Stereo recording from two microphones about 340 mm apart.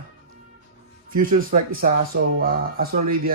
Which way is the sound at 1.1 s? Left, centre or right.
Right.